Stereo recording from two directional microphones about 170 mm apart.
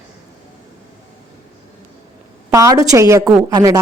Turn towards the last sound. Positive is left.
turn(degrees=-20)  # may be behind; listen again after turning